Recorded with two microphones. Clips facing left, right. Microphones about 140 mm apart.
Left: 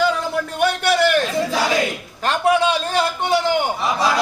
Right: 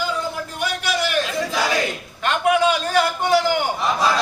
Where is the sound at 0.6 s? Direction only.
60° left (ahead or behind).